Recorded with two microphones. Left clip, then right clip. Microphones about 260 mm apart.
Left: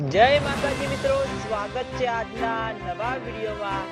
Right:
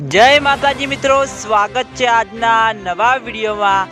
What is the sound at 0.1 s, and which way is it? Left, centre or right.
Music, right.